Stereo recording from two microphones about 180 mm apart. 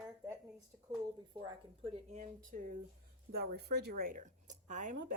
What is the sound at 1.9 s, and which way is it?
Speech, 45° right (ahead or behind).